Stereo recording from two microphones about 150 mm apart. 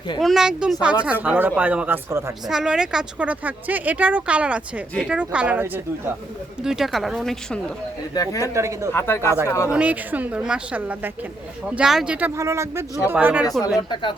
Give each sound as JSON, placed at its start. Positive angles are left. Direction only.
{"t": 0.2, "sound": "speech", "side_deg": 0}
{"t": 2.5, "sound": "speech", "side_deg": -5}
{"t": 8.1, "sound": "speech", "side_deg": 25}
{"t": 8.5, "sound": "speech", "side_deg": -20}
{"t": 8.9, "sound": "speech", "side_deg": 15}
{"t": 9.7, "sound": "speech", "side_deg": -10}